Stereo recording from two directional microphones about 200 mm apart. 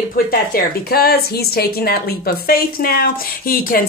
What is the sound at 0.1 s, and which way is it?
Speech, 45° left (ahead or behind).